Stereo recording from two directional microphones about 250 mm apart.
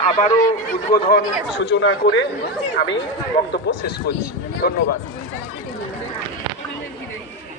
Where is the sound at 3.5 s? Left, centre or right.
Left.